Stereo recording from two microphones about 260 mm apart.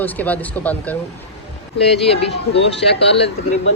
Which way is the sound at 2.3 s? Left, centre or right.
Left.